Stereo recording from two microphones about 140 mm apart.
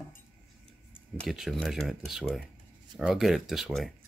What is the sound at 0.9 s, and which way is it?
Speech, 5° right (ahead or behind).